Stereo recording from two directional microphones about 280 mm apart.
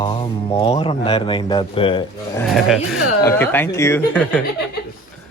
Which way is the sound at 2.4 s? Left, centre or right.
Centre.